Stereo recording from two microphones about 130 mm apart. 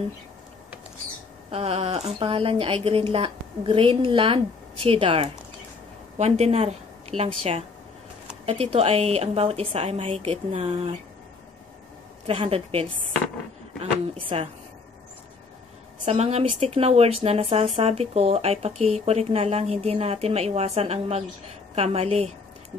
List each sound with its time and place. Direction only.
1.5 s a woman's voice: 50° right (ahead or behind)
6.1 s a woman's voice: 55° right (ahead or behind)
12.4 s a woman's voice: 50° right (ahead or behind)
14.3 s a woman's voice: 45° right (ahead or behind)
16.1 s a woman's voice: 55° right (ahead or behind)